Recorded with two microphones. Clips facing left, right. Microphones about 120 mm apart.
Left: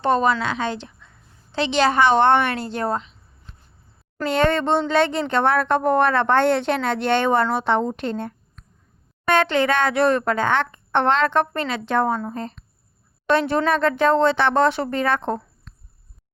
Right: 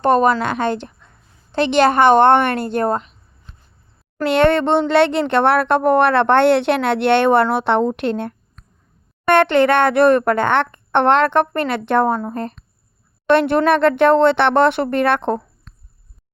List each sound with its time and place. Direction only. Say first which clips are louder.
0.0 s a woman's voice: right 5 dB; 50° right (ahead or behind)
4.2 s a woman's voice: right 5 dB; 70° right (ahead or behind)